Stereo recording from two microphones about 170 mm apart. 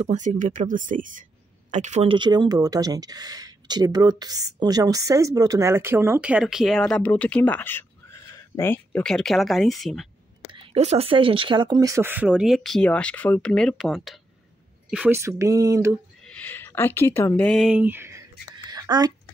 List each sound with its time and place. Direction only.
0.0 s speech: 45° right (ahead or behind)
2.1 s speech: 25° right (ahead or behind); by 10.0 s centre (ahead or behind)
10.5 s speech: 35° right (ahead or behind); by 15.1 s 5° right (ahead or behind)
15.1 s speech: 15° right (ahead or behind)
16.3 s speech: 10° left (ahead or behind)
17.8 s speech: 15° right (ahead or behind)
18.7 s a sound: 25° right (ahead or behind)